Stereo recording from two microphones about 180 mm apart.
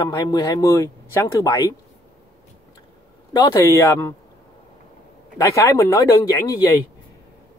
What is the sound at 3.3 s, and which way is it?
Speech, 20° left (ahead or behind).